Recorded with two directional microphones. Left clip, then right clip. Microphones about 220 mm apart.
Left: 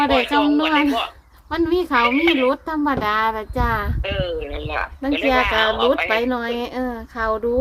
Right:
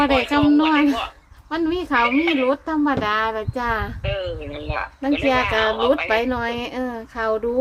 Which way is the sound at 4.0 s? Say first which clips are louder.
Left 2 dB; 40° left (ahead or behind).